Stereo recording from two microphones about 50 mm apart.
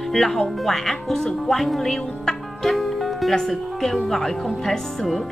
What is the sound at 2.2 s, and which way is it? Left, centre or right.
Music, centre.